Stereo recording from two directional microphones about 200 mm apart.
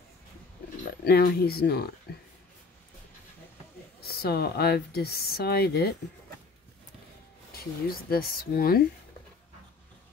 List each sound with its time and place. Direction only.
1.0 s speech: 50° left (ahead or behind)
4.0 s speech: 50° left (ahead or behind)
7.5 s speech: 50° left (ahead or behind)